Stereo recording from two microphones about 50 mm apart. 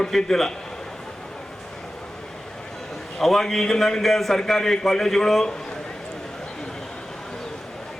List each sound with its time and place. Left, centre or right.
0.0 s a man's voice: centre
3.2 s a man's voice: centre